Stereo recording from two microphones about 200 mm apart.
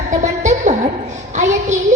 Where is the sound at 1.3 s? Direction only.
35° right (ahead or behind).